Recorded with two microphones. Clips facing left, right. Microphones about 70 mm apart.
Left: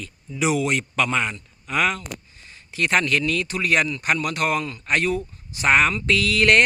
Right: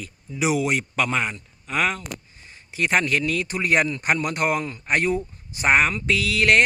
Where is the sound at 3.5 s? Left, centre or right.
Right.